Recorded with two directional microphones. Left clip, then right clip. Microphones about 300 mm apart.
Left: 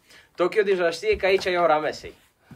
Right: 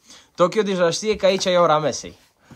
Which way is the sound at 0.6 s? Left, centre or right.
Right.